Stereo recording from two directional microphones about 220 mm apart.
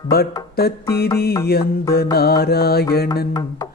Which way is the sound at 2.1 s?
45° left (ahead or behind).